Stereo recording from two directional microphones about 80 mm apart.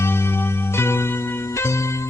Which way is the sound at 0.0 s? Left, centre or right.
Left.